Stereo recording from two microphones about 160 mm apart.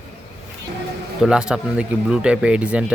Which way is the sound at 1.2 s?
5° right (ahead or behind).